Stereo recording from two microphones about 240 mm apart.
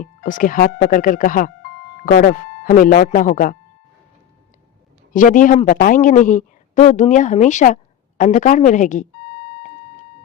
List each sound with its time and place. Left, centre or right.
0.0 s a man's voice: left
5.1 s a man's voice: left